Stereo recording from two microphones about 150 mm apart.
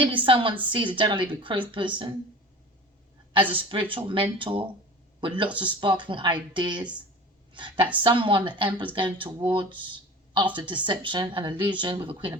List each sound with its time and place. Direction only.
0.0 s a woman's voice: 35° right (ahead or behind)
3.5 s a woman's voice: 35° right (ahead or behind)